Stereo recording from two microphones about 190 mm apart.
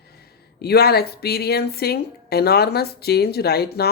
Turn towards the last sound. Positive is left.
turn(degrees=55)  # may be behind; listen again after turning